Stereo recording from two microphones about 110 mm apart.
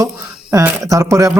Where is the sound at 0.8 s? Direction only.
30° right (ahead or behind).